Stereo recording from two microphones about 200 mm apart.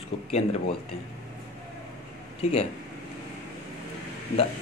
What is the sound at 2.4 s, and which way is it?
Speech, 30° left (ahead or behind).